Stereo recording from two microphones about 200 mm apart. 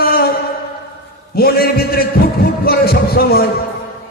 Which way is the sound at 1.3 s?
50° left (ahead or behind).